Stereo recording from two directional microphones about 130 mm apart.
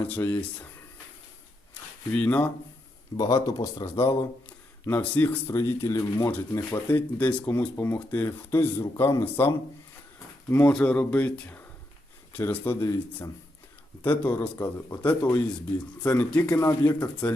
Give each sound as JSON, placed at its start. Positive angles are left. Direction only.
{"t": 0.0, "sound": "speech", "side_deg": 15}
{"t": 2.1, "sound": "speech", "side_deg": 10}
{"t": 3.2, "sound": "speech", "side_deg": 25}
{"t": 4.9, "sound": "speech", "side_deg": 10}
{"t": 10.5, "sound": "speech", "side_deg": 10}
{"t": 14.0, "sound": "speech", "side_deg": 15}